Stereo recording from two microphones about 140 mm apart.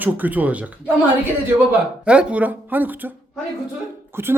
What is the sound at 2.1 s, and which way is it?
Speech, 10° right (ahead or behind).